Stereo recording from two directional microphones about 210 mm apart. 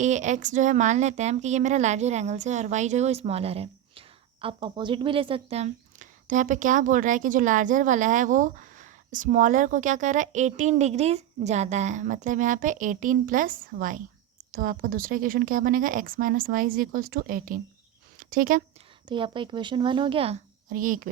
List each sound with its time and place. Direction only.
0.0 s speech: 35° right (ahead or behind)
19.0 s speech: 25° right (ahead or behind)
20.7 s speech: 40° right (ahead or behind)